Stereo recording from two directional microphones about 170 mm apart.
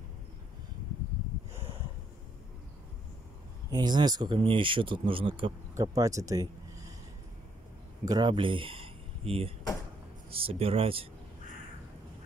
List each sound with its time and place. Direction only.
3.7 s speech: 25° right (ahead or behind)
5.8 s speech: 20° right (ahead or behind)
8.0 s speech: 25° right (ahead or behind)